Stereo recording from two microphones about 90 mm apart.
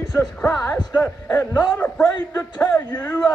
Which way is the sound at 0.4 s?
20° left (ahead or behind).